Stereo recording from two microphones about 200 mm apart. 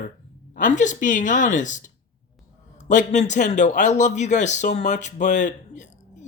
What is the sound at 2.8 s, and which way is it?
A man's voice, 40° left (ahead or behind).